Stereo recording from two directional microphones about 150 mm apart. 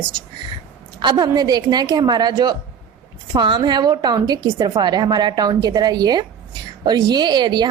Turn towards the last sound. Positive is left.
turn(degrees=-30)  # may be behind; listen again after turning